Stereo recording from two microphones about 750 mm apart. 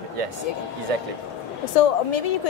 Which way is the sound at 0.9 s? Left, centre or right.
Right.